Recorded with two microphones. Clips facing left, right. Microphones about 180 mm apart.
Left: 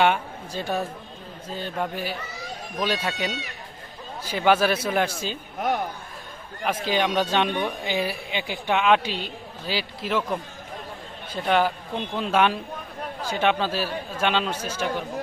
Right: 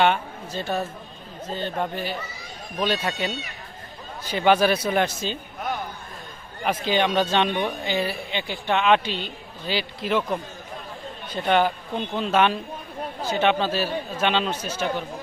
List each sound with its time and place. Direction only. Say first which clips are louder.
0.0 s a man's voice: even; 10° left (ahead or behind)
5.5 s a sound: left 7 dB; 70° left (ahead or behind)
6.7 s a woman's voice: right 1 dB; 5° left (ahead or behind)